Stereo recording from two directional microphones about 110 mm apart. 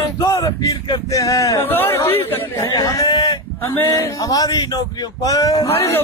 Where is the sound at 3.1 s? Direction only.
45° left (ahead or behind).